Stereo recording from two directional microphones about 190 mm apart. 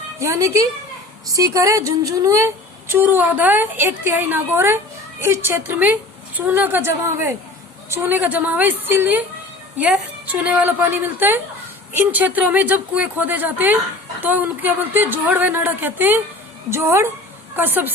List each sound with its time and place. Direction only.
0.2 s a woman's voice: 15° right (ahead or behind)